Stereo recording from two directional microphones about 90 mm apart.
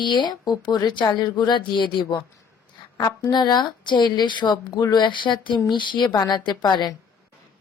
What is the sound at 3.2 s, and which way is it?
Speech, 55° left (ahead or behind).